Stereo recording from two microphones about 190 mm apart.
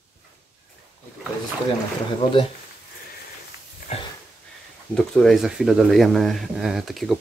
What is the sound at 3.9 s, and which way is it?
Dog, 35° left (ahead or behind).